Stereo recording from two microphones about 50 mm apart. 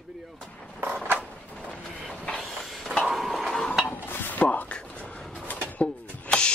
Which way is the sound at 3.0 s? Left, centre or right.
Centre.